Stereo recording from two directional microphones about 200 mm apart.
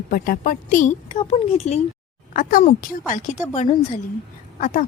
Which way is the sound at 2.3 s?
45° left (ahead or behind).